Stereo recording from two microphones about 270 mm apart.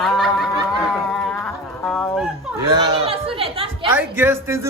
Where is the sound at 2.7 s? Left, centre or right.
Right.